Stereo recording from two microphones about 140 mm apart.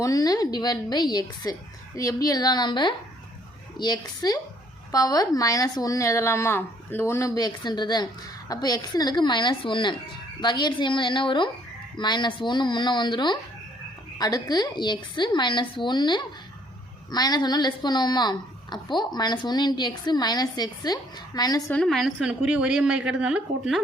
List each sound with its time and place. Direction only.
0.0 s a woman's voice: 25° left (ahead or behind)
21.7 s a woman's voice: 5° left (ahead or behind)